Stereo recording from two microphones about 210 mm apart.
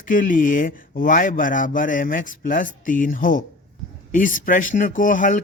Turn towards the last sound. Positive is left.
turn(degrees=40)  # may be behind; listen again after turning